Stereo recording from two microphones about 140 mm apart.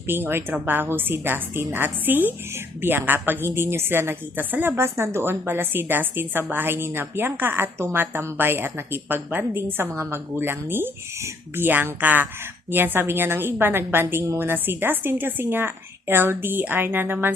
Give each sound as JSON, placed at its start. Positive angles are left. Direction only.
{"t": 0.1, "sound": "a woman's voice", "side_deg": -15}